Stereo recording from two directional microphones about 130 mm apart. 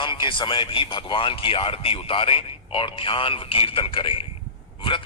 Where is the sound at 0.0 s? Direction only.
40° left (ahead or behind).